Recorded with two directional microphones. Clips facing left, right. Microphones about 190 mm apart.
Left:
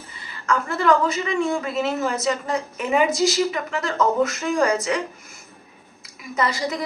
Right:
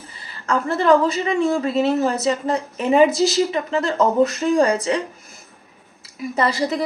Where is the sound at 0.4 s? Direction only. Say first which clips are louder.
Right 3 dB; 35° right (ahead or behind).